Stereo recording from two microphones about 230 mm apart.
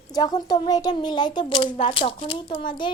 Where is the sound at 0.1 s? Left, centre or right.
Centre.